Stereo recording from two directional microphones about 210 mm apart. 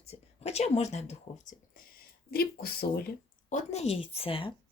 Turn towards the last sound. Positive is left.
turn(degrees=25)  # may be behind; listen again after turning